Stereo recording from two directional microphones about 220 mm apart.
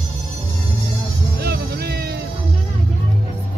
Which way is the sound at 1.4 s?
45° right (ahead or behind).